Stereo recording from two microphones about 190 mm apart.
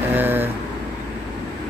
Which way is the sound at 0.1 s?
10° right (ahead or behind).